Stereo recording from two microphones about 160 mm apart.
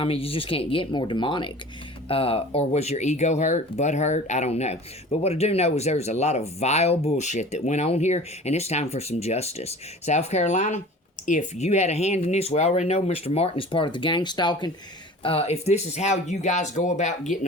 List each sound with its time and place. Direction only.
0.0 s speech: 35° left (ahead or behind)